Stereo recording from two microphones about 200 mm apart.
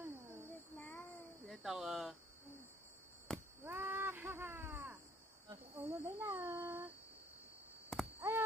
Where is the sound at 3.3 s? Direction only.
5° left (ahead or behind).